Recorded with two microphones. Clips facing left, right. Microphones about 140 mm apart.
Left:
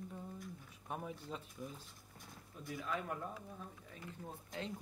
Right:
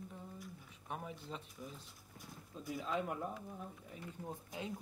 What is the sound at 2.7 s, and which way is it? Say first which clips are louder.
Speech: right 2 dB; 20° right (ahead or behind).